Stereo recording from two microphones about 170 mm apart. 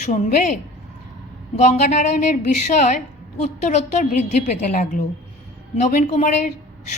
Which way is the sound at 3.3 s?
40° left (ahead or behind).